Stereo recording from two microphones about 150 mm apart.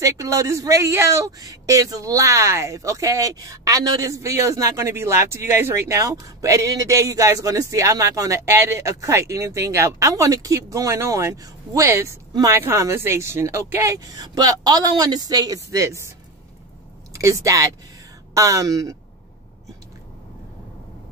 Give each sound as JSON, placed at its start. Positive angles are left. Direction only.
{"t": 0.0, "sound": "speech", "side_deg": -20}
{"t": 17.2, "sound": "speech", "side_deg": -20}